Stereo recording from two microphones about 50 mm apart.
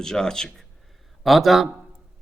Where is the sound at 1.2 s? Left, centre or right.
Centre.